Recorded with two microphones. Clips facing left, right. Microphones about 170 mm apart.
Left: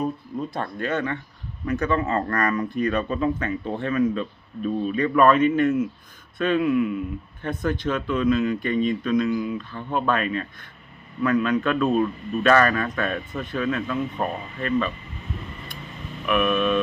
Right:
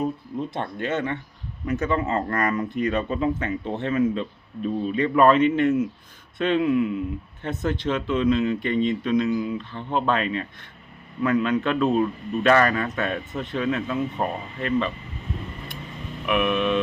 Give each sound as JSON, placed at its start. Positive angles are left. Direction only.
{"t": 0.5, "sound": "a man's voice", "side_deg": -25}
{"t": 16.2, "sound": "a man's voice", "side_deg": -15}